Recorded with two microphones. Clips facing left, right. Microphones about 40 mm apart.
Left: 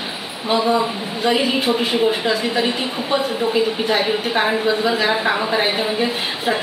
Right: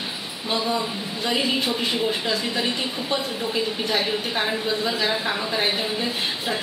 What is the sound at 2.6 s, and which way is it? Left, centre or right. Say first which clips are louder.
A woman's voice: left 5 dB; centre.